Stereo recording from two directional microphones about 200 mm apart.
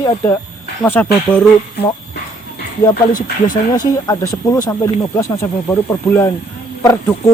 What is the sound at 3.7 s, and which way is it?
Speech, 20° left (ahead or behind).